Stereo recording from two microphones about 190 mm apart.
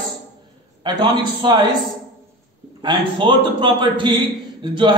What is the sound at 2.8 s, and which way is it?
A man's voice, 25° right (ahead or behind).